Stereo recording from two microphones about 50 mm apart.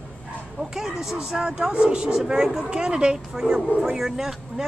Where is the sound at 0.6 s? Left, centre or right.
Centre.